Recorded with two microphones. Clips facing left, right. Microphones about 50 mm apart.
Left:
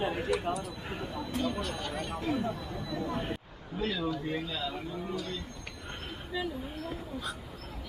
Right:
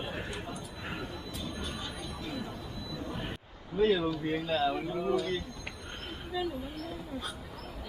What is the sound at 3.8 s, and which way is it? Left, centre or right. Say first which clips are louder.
Speech: right 7 dB; centre.